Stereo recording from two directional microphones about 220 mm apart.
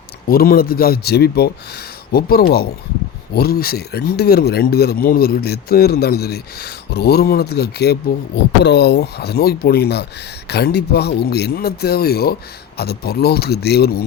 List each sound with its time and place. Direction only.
0.3 s speech: 40° left (ahead or behind)